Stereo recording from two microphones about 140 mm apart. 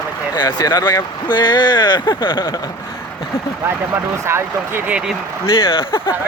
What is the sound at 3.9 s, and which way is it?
Speech, 15° right (ahead or behind).